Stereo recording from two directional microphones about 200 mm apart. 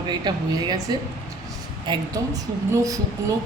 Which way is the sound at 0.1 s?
20° right (ahead or behind).